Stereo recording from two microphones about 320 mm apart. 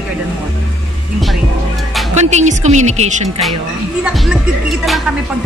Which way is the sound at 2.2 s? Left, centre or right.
Right.